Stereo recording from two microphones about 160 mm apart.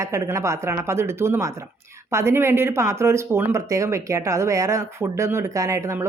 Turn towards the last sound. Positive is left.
turn(degrees=-20)  # may be behind; listen again after turning